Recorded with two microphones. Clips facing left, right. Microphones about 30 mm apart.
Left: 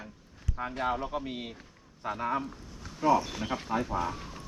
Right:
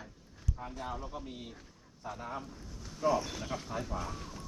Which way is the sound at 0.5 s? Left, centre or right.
Left.